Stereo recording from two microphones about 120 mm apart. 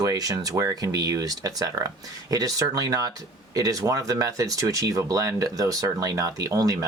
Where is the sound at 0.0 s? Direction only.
30° right (ahead or behind).